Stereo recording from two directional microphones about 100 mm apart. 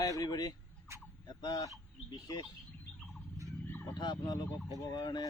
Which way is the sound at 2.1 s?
40° left (ahead or behind).